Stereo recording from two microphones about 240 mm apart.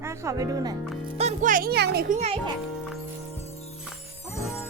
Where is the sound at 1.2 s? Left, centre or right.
Right.